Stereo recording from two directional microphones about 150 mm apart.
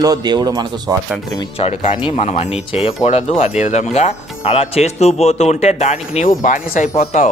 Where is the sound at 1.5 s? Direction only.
40° left (ahead or behind).